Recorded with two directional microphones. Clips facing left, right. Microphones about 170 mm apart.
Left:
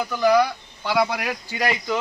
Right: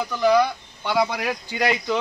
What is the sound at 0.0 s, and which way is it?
Speech, 5° left (ahead or behind).